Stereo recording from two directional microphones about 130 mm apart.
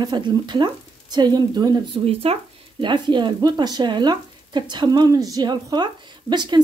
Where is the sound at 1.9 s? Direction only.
50° right (ahead or behind).